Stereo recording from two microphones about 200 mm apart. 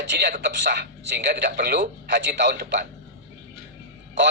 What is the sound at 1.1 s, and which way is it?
A man's voice, 55° right (ahead or behind).